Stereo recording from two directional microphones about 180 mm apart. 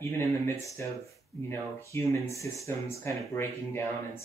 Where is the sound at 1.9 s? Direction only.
15° left (ahead or behind).